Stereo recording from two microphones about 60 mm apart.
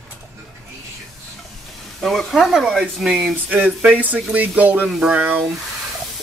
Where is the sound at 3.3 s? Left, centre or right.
Right.